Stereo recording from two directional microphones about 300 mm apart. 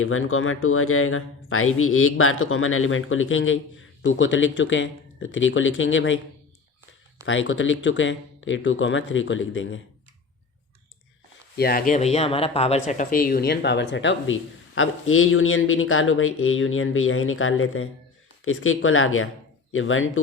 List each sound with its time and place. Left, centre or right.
0.0 s speech: left
7.3 s speech: left
11.5 s speech: left